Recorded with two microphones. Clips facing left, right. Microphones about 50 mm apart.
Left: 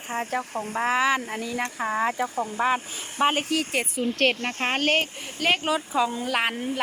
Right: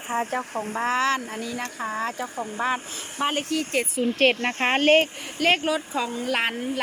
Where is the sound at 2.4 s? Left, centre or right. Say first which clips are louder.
Left 1 dB; centre.